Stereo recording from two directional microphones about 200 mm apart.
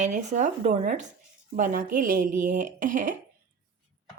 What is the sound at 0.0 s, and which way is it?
A woman's voice, 35° right (ahead or behind).